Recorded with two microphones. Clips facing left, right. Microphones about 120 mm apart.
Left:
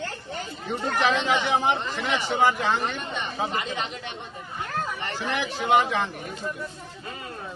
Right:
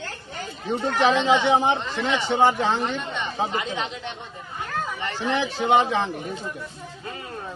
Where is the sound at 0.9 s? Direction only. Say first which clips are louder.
Right 4 dB; 25° right (ahead or behind).